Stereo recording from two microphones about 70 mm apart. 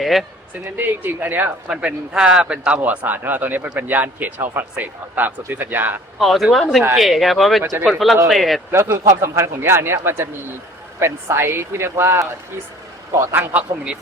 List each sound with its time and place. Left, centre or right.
0.0 s speech: centre
0.8 s speech: right
1.7 s speech: centre
6.1 s speech: centre
8.9 s speech: right
13.3 s speech: centre